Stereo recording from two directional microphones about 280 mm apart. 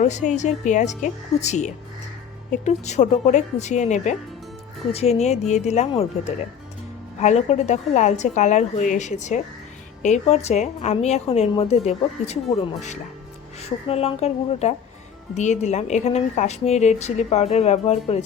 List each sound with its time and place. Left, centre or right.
0.0 s a woman's voice: left